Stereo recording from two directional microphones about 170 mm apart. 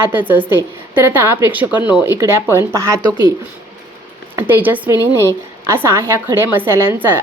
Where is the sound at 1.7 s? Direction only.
25° left (ahead or behind).